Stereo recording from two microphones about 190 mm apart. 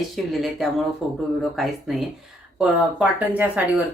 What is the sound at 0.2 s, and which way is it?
Speech, centre (ahead or behind).